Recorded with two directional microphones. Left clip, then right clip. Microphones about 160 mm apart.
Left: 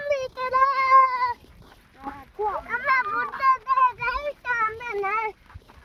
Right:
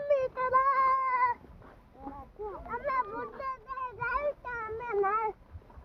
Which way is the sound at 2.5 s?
40° left (ahead or behind).